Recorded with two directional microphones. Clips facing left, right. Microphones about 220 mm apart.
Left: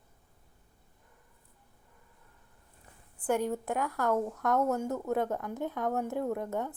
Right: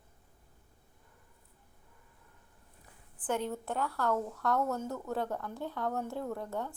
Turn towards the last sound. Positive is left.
turn(degrees=20)  # may be behind; listen again after turning